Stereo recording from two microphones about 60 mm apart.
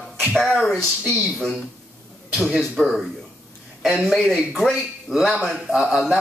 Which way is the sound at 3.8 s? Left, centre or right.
Centre.